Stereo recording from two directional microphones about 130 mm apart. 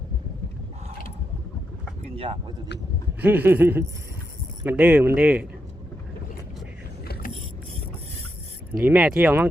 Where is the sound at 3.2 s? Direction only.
15° right (ahead or behind).